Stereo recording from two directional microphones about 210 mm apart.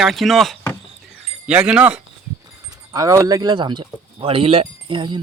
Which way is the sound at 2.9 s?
15° right (ahead or behind).